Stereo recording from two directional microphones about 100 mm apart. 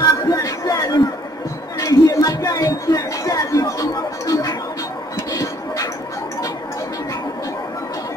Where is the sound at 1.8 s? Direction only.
35° left (ahead or behind).